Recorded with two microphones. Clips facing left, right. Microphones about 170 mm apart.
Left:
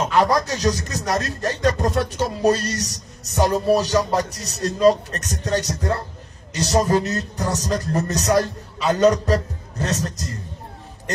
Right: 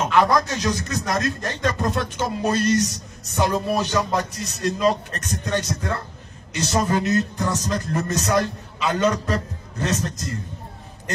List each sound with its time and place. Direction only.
0.0 s speech: 35° left (ahead or behind)